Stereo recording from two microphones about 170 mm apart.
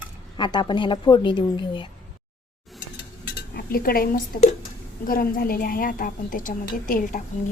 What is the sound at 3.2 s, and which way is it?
Cutlery, 65° left (ahead or behind).